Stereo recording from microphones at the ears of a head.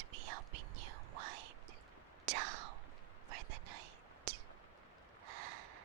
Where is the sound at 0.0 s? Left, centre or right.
Right.